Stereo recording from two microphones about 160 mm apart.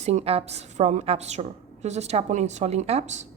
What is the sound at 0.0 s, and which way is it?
A woman's voice, 45° right (ahead or behind).